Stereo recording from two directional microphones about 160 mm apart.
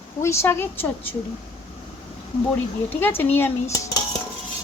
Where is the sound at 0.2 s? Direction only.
15° left (ahead or behind).